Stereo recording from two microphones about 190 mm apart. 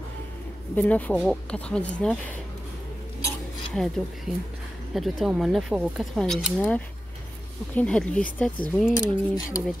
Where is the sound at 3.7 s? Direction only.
Centre (ahead or behind).